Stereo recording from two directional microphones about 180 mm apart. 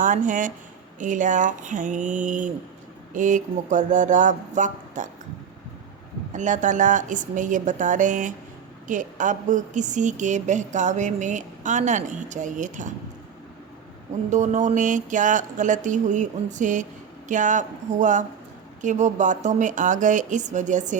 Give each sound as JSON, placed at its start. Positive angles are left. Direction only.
{"t": 0.0, "sound": "a woman's voice", "side_deg": -45}
{"t": 6.3, "sound": "a woman's voice", "side_deg": -45}
{"t": 14.3, "sound": "a woman's voice", "side_deg": -40}